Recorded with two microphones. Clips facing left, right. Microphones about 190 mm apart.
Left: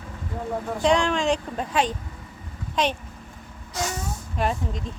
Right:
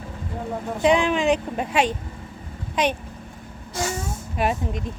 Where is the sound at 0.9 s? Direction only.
15° right (ahead or behind).